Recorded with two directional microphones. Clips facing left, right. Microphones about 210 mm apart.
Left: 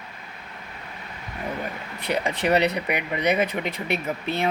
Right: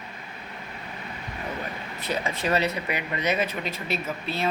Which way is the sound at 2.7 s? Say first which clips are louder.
Left 3 dB; 15° left (ahead or behind).